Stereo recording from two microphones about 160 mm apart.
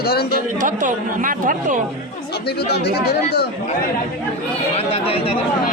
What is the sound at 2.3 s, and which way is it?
Speech, 90° left.